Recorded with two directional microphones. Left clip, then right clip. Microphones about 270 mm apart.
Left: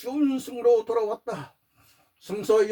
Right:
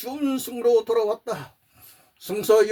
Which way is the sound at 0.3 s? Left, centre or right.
Right.